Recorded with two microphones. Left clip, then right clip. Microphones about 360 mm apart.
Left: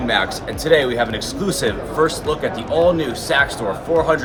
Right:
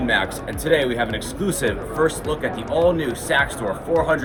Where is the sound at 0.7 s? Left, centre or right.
Centre.